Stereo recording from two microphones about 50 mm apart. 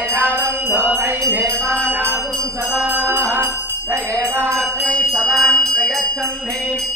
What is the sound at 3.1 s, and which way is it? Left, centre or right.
Music, right.